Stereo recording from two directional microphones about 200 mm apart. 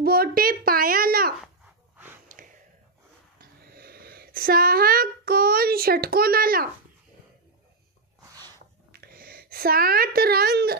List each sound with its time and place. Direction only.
0.0 s a sound: 50° right (ahead or behind)
8.3 s snort: 20° right (ahead or behind)
8.9 s a woman's voice: 50° right (ahead or behind)